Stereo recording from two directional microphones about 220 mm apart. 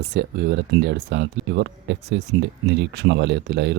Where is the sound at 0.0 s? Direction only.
50° right (ahead or behind).